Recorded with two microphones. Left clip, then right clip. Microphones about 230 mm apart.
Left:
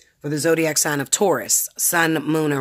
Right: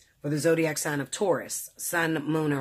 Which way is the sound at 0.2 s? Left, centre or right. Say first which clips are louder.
Left 5 dB; left.